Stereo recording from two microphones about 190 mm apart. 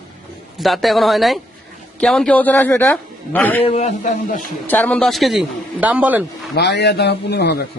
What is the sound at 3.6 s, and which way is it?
Speech, 35° left (ahead or behind).